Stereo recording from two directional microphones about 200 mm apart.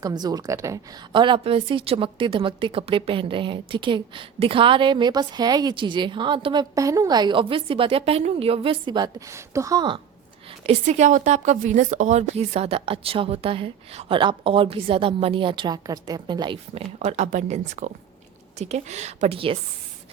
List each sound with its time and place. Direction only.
0.0 s a woman's voice: 20° right (ahead or behind)
10.7 s a woman's voice: 35° right (ahead or behind)